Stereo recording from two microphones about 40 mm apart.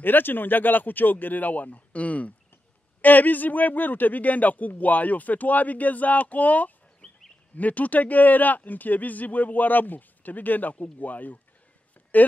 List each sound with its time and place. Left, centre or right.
0.0 s speech: left
3.0 s speech: left